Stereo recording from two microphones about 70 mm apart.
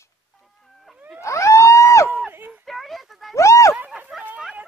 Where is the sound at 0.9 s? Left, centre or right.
Right.